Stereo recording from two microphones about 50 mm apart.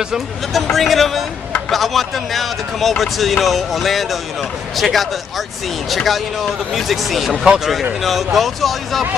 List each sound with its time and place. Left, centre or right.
0.1 s speech: centre